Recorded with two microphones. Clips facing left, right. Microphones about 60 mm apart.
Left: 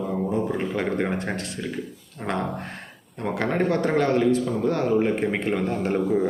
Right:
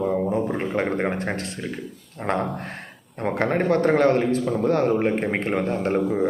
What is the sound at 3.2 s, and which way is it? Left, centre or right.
A man's voice, right.